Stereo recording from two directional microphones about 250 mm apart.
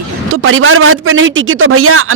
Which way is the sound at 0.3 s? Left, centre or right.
Right.